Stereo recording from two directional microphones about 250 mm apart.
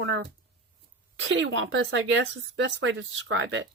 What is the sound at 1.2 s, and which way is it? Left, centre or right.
Speech, right.